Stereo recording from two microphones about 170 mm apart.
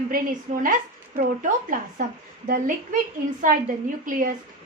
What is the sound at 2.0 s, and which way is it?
Speech, 55° right (ahead or behind).